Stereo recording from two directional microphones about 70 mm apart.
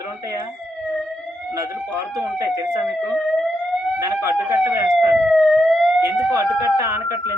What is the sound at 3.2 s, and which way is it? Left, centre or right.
Siren, centre.